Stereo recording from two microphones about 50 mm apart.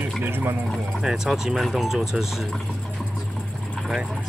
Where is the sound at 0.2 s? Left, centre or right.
Right.